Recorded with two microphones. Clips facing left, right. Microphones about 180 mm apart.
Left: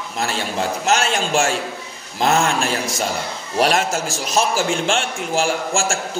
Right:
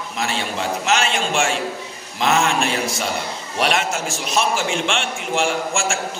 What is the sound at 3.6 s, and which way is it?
A man's voice, 40° left (ahead or behind).